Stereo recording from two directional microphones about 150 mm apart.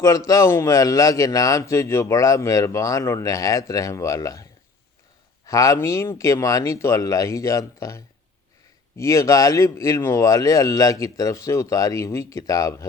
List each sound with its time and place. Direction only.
0.3 s a man's voice: 20° left (ahead or behind)
5.5 s a man's voice: 20° left (ahead or behind)